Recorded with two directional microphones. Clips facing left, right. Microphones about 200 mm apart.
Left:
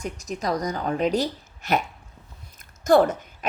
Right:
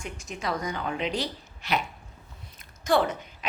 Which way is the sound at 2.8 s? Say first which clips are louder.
Left 6 dB; 45° left (ahead or behind).